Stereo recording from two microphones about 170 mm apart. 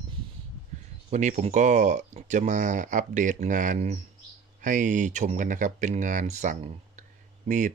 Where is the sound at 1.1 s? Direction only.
45° right (ahead or behind).